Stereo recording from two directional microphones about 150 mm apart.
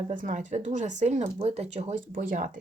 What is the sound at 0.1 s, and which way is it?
Speech, 60° right (ahead or behind).